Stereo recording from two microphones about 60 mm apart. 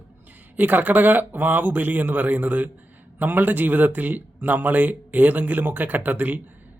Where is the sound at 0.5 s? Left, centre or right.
Right.